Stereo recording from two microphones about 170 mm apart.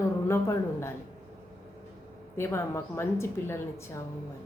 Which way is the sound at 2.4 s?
15° left (ahead or behind).